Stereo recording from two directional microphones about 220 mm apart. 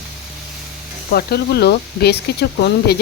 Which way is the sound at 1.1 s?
45° left (ahead or behind).